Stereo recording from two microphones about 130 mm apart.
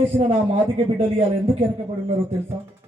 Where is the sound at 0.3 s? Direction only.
45° right (ahead or behind).